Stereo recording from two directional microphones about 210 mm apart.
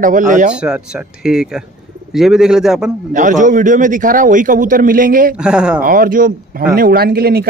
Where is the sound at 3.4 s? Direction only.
35° right (ahead or behind).